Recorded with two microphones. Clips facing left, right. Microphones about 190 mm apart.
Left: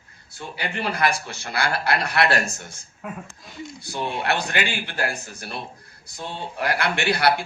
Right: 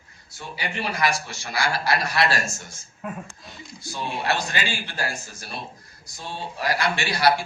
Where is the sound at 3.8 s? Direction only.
60° left (ahead or behind).